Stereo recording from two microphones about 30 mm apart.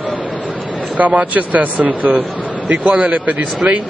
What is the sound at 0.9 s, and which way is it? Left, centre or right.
Speech, right.